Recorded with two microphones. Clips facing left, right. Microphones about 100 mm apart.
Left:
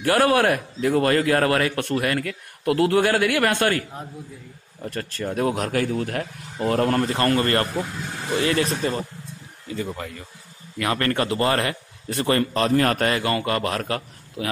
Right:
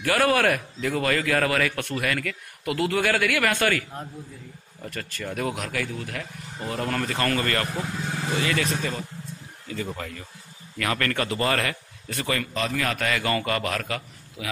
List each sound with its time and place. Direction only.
0.0 s a man's voice: 30° left (ahead or behind)
4.8 s speech: 35° left (ahead or behind); by 6.9 s 55° left (ahead or behind)
6.9 s a man's voice: 30° left (ahead or behind)
9.8 s speech: 15° left (ahead or behind)
10.8 s a man's voice: 25° left (ahead or behind)
12.3 s a man's voice: 40° left (ahead or behind)
13.2 s a man's voice: 25° left (ahead or behind)